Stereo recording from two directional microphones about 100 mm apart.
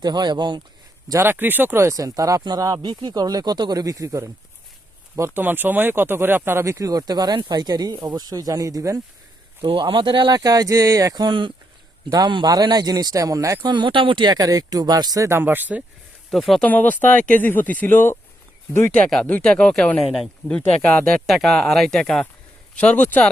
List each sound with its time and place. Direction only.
0.0 s speech: 45° right (ahead or behind)
1.2 s speech: 20° right (ahead or behind)
9.6 s speech: 55° right (ahead or behind); by 13.7 s 35° right (ahead or behind)
13.7 s speech: 55° right (ahead or behind)
14.3 s speech: 40° right (ahead or behind)
15.3 s speech: 20° right (ahead or behind)
16.3 s speech: centre (ahead or behind)
16.6 s speech: 15° left (ahead or behind)